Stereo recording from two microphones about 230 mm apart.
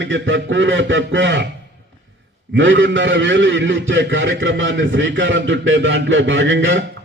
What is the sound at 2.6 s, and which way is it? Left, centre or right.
A man's voice, right.